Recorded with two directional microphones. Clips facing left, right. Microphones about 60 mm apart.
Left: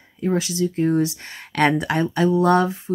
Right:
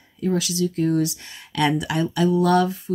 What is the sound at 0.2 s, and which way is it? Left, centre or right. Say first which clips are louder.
Speech: left 1 dB; left.